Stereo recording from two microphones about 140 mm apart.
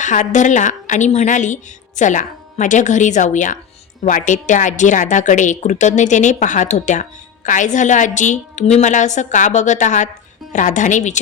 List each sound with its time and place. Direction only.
0.0 s a woman's voice: 60° left (ahead or behind)